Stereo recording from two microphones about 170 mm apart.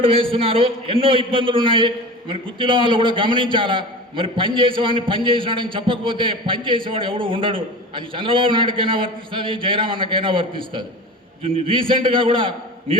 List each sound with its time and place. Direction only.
0.0 s a man's voice: 30° right (ahead or behind)